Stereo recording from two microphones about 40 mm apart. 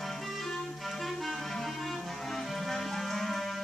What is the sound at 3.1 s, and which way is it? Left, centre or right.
Music, centre.